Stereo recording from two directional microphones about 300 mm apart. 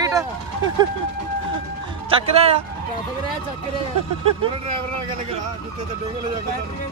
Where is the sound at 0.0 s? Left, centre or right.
Centre.